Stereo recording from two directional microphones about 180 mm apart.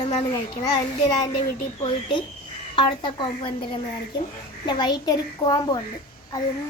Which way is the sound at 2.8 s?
25° left (ahead or behind).